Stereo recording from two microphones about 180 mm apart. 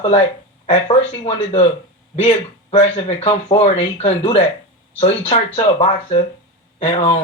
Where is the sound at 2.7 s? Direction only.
25° left (ahead or behind).